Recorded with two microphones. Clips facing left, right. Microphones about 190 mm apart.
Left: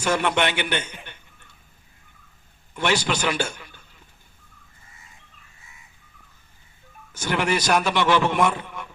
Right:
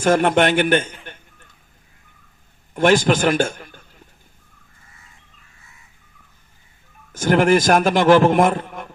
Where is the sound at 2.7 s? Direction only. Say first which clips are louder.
Right 8 dB; 50° right (ahead or behind).